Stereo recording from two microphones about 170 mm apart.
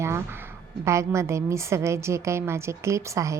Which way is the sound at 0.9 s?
15° right (ahead or behind).